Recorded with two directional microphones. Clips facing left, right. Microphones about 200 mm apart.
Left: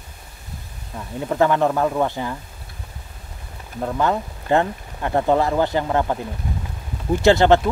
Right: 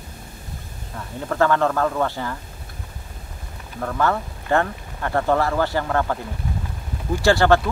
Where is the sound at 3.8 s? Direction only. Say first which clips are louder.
Left 1 dB; 20° left (ahead or behind).